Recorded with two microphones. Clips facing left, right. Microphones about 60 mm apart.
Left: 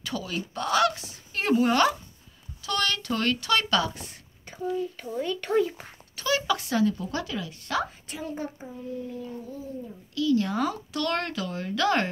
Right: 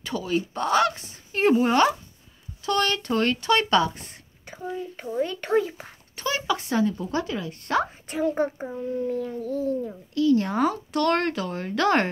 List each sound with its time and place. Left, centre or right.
0.0 s goose: right
0.6 s speech: right
2.6 s speech: right; by 5.9 s centre
6.1 s a child's voice: right
9.5 s a child's voice: right
10.1 s speech: right